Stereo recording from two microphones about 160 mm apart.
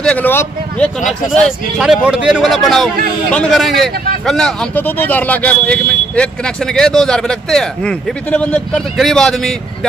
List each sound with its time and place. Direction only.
0.0 s speech: 10° left (ahead or behind)
1.4 s speech: 5° right (ahead or behind)